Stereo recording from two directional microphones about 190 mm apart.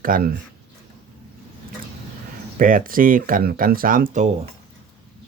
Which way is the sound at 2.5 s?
45° right (ahead or behind).